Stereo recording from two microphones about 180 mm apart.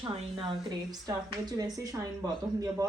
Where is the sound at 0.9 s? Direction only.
20° right (ahead or behind).